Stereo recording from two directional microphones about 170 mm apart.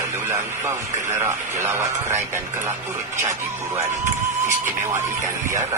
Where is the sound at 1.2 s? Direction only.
15° right (ahead or behind).